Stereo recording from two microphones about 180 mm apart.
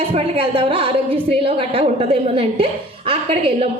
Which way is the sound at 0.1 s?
30° right (ahead or behind).